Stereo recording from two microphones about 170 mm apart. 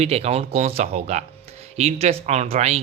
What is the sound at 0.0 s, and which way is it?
Speech, 40° right (ahead or behind).